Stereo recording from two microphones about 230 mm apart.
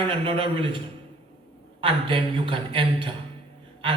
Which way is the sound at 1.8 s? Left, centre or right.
Right.